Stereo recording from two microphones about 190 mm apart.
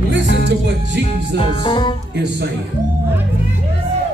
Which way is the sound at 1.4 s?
25° left (ahead or behind).